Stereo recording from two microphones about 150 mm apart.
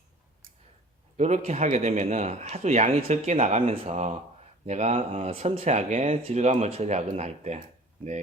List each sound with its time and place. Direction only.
1.1 s speech: 50° right (ahead or behind)